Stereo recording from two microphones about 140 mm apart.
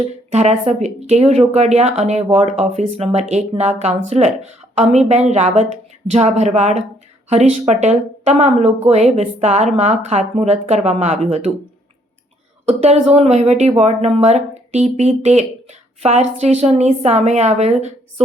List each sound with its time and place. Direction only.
0.3 s speech: 50° right (ahead or behind)
12.6 s speech: 50° right (ahead or behind)